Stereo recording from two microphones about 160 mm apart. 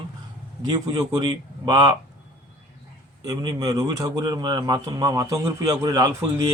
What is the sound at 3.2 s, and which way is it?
Speech, 25° right (ahead or behind).